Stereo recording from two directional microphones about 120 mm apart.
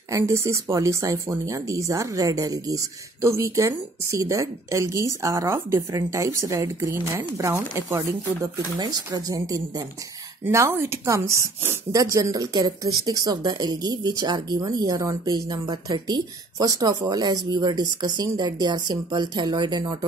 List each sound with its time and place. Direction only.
0.1 s speech: 25° right (ahead or behind)
8.7 s speech: 35° right (ahead or behind)
10.4 s speech: 20° right (ahead or behind)